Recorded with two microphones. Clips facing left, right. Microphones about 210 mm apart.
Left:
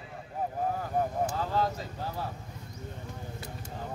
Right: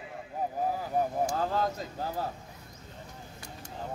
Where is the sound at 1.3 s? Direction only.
45° right (ahead or behind).